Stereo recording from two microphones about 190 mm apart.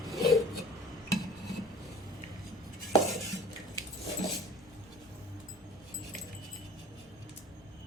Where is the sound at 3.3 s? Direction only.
Centre (ahead or behind).